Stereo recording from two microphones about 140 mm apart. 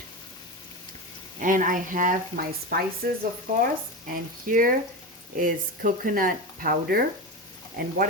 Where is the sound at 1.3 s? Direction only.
70° right (ahead or behind).